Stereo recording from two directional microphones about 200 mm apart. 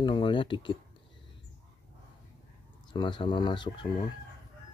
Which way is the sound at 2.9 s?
20° left (ahead or behind).